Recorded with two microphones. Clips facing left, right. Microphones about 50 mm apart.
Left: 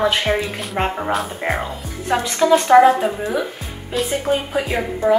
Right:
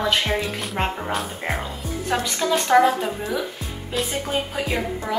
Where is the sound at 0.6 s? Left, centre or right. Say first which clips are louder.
Left 4 dB; centre.